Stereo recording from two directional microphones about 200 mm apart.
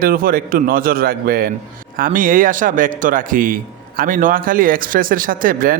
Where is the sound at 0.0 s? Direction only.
45° right (ahead or behind).